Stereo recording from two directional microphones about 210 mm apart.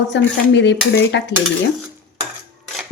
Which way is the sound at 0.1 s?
55° left (ahead or behind).